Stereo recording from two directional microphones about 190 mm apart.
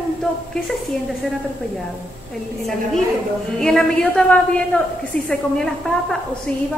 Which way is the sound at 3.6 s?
5° left (ahead or behind).